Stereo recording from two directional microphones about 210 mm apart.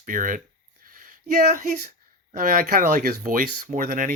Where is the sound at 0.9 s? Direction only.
40° right (ahead or behind).